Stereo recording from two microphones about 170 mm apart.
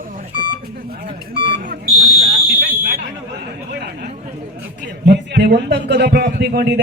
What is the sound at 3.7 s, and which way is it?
Chatter, 70° right (ahead or behind).